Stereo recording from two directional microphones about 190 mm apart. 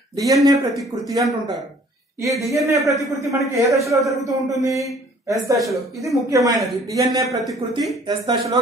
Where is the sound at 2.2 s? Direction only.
15° right (ahead or behind).